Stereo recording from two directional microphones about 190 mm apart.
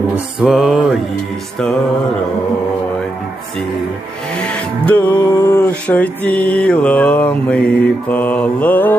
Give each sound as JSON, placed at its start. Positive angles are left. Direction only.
{"t": 0.3, "sound": "music", "side_deg": 0}
{"t": 4.9, "sound": "mantra", "side_deg": 10}
{"t": 5.4, "sound": "a sound", "side_deg": 20}
{"t": 6.0, "sound": "mantra", "side_deg": 10}